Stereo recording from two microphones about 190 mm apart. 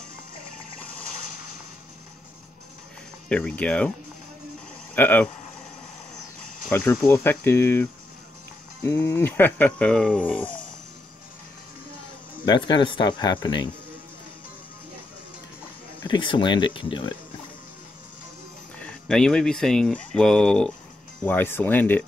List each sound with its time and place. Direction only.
3.3 s speech: 5° left (ahead or behind)
4.9 s speech: 10° left (ahead or behind)
6.4 s speech: 10° left (ahead or behind)
12.4 s speech: 25° left (ahead or behind)
16.0 s speech: 25° left (ahead or behind)
18.8 s speech: 5° left (ahead or behind)